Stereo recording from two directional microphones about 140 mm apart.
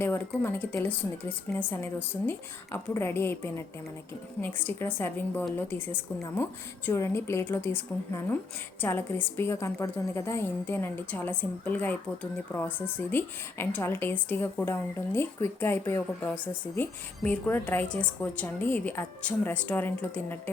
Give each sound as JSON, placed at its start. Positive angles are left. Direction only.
{"t": 0.0, "sound": "a woman's voice", "side_deg": 15}